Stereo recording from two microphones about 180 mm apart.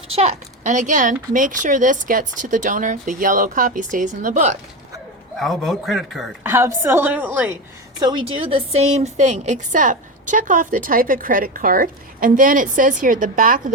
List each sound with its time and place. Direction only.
0.2 s a woman's voice: 40° right (ahead or behind)
5.4 s a man's voice: centre (ahead or behind)
6.4 s a woman's voice: 15° right (ahead or behind)
7.9 s a woman's voice: 25° right (ahead or behind); by 13.7 s 50° right (ahead or behind)